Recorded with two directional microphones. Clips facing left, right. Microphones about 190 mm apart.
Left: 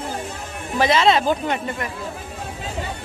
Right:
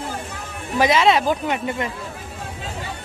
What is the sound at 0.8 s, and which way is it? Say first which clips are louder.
Speech: even; 10° right (ahead or behind).